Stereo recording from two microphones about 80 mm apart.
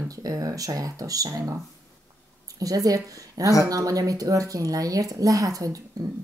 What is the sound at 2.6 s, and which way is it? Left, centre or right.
Speech, right.